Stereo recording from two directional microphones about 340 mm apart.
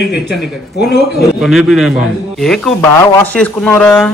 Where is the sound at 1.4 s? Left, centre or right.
Centre.